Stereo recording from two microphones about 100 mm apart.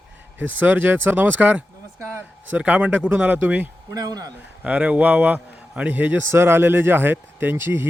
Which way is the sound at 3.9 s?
40° right (ahead or behind).